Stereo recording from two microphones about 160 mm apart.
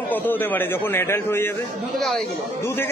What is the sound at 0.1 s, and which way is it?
A man's voice, 10° left (ahead or behind).